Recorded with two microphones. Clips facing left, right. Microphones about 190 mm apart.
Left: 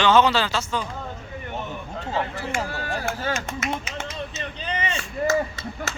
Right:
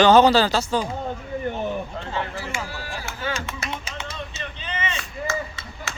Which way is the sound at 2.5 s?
55° left (ahead or behind).